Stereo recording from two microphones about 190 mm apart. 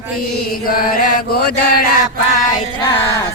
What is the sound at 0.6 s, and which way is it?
Chant, 50° left (ahead or behind).